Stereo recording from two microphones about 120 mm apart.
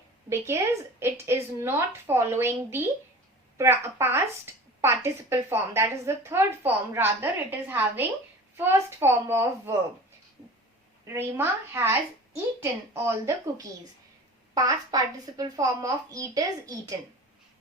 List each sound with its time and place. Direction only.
0.3 s a woman's voice: 20° right (ahead or behind)
11.0 s a woman's voice: 20° right (ahead or behind)